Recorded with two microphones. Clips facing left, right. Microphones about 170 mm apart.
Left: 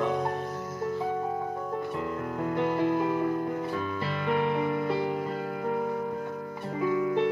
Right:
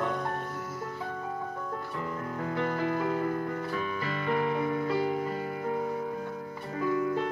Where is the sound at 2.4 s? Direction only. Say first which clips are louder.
Left 4 dB; 15° left (ahead or behind).